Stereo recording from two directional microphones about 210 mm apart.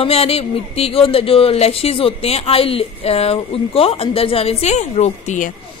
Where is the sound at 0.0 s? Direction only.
30° left (ahead or behind).